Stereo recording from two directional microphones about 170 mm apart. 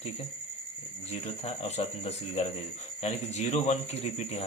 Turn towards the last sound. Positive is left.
turn(degrees=40)  # may be behind; listen again after turning